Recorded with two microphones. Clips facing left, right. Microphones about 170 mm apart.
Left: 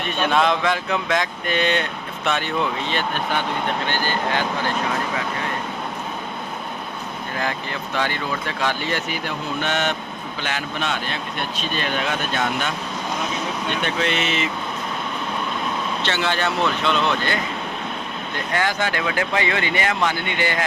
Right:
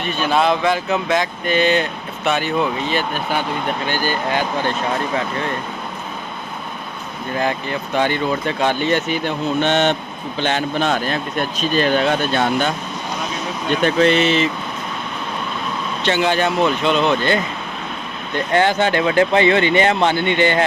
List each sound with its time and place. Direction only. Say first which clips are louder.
0.0 s speech: right 2 dB; centre (ahead or behind)
7.3 s speech: right 6 dB; 20° right (ahead or behind)
16.0 s speech: right 7 dB; 15° right (ahead or behind)
18.5 s speech: right 7 dB; 25° right (ahead or behind)